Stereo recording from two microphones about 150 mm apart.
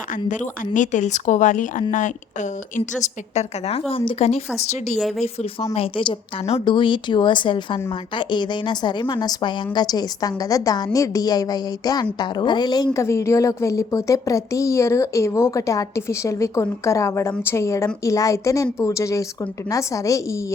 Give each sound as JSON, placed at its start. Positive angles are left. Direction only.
{"t": 0.3, "sound": "a woman's voice", "side_deg": 55}
{"t": 3.7, "sound": "a woman's voice", "side_deg": 40}
{"t": 4.9, "sound": "speech", "side_deg": 0}
{"t": 5.2, "sound": "a woman's voice", "side_deg": 45}